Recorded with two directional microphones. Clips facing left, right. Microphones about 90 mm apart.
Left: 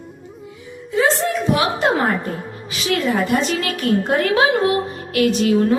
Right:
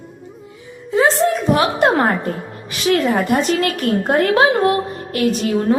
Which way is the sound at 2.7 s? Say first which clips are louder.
Right 4 dB; 50° right (ahead or behind).